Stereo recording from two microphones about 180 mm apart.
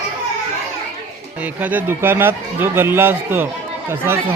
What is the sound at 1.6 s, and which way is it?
A man's voice, 10° right (ahead or behind).